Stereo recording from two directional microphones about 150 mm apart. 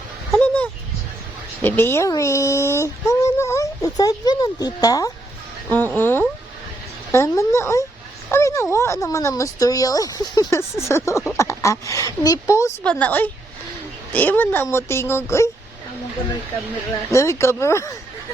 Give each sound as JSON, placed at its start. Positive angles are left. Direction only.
{"t": 0.3, "sound": "a sound", "side_deg": 10}
{"t": 1.6, "sound": "speech", "side_deg": 15}
{"t": 8.3, "sound": "a sound", "side_deg": 20}
{"t": 8.7, "sound": "speech", "side_deg": 20}
{"t": 12.8, "sound": "speech", "side_deg": 10}
{"t": 17.1, "sound": "speech", "side_deg": 20}